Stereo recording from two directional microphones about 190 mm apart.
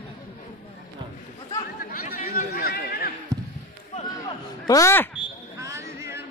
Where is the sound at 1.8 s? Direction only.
50° left (ahead or behind).